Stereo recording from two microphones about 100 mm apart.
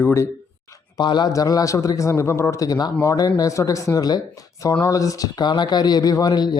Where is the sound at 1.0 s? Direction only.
50° left (ahead or behind).